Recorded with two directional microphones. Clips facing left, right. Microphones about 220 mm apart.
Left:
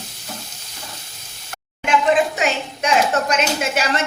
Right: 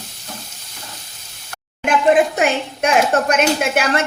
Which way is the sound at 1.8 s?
55° right (ahead or behind).